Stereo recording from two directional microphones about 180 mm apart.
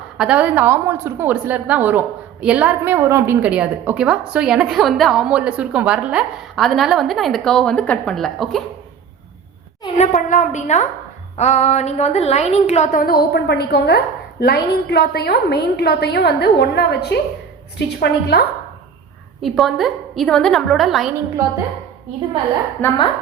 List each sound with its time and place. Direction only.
0.2 s a woman's voice: 5° right (ahead or behind)
9.8 s a woman's voice: 40° left (ahead or behind); by 18.4 s 65° left (ahead or behind)
19.4 s a woman's voice: centre (ahead or behind)
22.8 s speech: 10° left (ahead or behind)